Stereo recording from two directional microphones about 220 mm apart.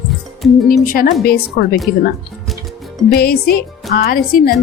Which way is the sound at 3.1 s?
45° left (ahead or behind).